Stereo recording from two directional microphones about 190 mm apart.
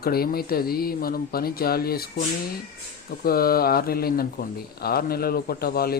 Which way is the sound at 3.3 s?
50° left (ahead or behind).